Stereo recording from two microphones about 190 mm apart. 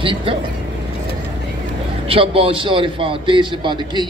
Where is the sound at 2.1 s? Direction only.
30° right (ahead or behind).